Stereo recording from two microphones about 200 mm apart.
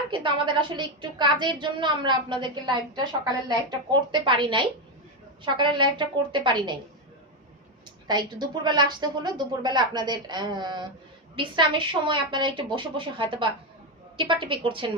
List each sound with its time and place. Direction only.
0.1 s a woman's voice: 25° right (ahead or behind)
8.0 s a woman's voice: 20° right (ahead or behind)